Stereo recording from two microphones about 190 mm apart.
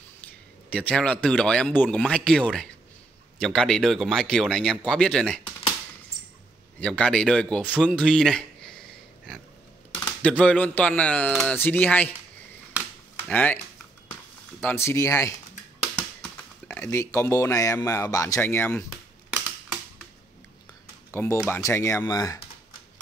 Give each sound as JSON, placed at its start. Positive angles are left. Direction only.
{"t": 0.2, "sound": "a man's voice", "side_deg": 5}
{"t": 6.8, "sound": "a man's voice", "side_deg": 5}
{"t": 10.2, "sound": "speech", "side_deg": 5}
{"t": 13.3, "sound": "speech", "side_deg": 10}
{"t": 14.6, "sound": "speech", "side_deg": 10}
{"t": 21.1, "sound": "speech", "side_deg": 10}